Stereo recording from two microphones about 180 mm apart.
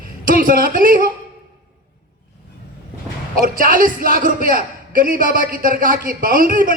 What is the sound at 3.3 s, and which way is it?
A man's voice, 50° right (ahead or behind).